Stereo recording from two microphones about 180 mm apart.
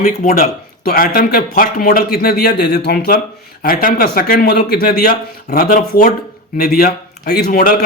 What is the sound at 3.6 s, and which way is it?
Speech, 50° left (ahead or behind).